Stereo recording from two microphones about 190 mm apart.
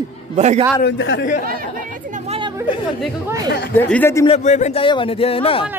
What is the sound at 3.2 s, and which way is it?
Speech, 20° right (ahead or behind).